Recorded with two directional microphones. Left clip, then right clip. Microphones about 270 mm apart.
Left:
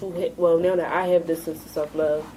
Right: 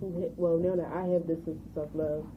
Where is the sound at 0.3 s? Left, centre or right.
Centre.